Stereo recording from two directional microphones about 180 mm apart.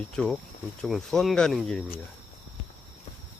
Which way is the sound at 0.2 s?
5° left (ahead or behind).